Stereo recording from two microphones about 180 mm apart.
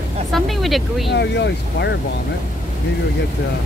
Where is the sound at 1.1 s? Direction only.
70° left (ahead or behind).